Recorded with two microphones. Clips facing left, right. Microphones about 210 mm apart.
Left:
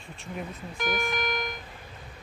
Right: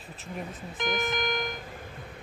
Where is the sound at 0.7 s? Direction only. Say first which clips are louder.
Even; 20° right (ahead or behind).